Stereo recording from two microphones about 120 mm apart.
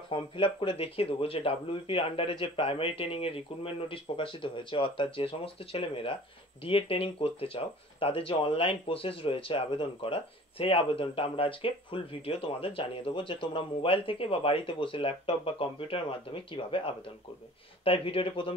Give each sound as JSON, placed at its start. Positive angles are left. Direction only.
{"t": 0.1, "sound": "speech", "side_deg": 45}